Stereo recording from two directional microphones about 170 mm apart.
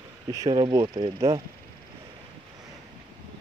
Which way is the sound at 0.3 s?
25° right (ahead or behind).